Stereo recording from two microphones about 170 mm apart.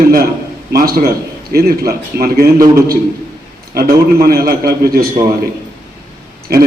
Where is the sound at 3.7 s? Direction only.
60° right (ahead or behind).